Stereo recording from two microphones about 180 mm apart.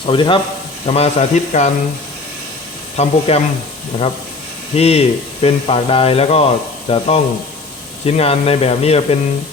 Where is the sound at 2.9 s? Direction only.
35° left (ahead or behind).